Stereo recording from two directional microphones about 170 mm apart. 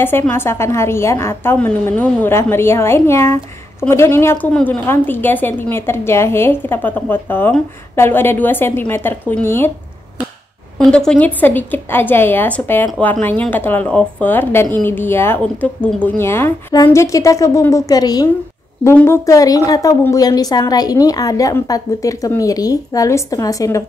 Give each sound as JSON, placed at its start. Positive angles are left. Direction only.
{"t": 0.0, "sound": "a woman's voice", "side_deg": 10}
{"t": 10.8, "sound": "a woman's voice", "side_deg": 5}